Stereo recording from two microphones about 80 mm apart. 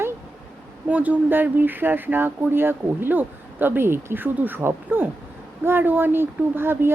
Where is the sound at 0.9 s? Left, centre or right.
Centre.